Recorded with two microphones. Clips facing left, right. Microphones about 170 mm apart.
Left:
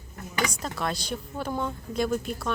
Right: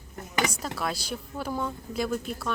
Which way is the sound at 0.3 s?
25° right (ahead or behind).